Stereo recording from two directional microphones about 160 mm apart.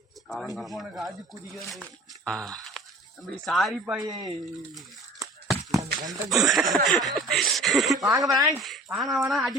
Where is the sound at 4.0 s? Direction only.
25° right (ahead or behind).